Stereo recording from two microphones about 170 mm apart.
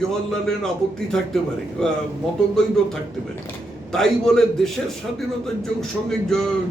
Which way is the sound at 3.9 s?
5° left (ahead or behind).